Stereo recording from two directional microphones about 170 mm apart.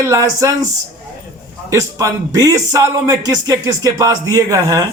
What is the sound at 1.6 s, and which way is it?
A man's voice, 20° right (ahead or behind).